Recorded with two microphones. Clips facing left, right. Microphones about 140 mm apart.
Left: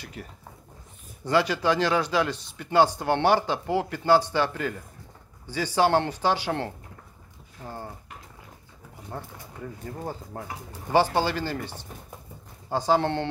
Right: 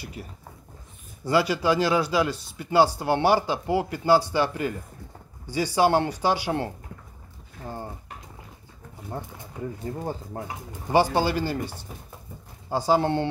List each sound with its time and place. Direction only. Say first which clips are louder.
0.0 s speech: right 2 dB; 10° right (ahead or behind)
7.6 s a sound: right 2 dB; 15° right (ahead or behind)
9.9 s speech: right 3 dB; 15° right (ahead or behind)